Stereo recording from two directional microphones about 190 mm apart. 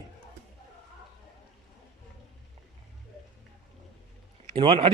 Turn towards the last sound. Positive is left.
turn(degrees=-25)  # may be behind; listen again after turning